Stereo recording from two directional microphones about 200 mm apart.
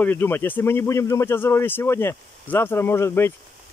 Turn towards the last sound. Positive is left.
turn(degrees=10)  # may be behind; listen again after turning